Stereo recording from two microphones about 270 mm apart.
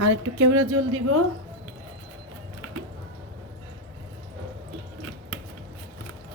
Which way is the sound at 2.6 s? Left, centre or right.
Right.